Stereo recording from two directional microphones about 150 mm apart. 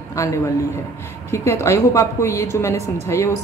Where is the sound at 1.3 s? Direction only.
20° left (ahead or behind).